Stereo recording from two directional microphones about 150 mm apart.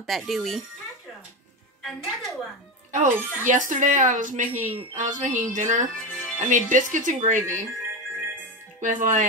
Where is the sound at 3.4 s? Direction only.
55° right (ahead or behind).